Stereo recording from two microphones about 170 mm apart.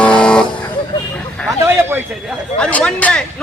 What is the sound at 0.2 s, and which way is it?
Vehicle, 5° left (ahead or behind).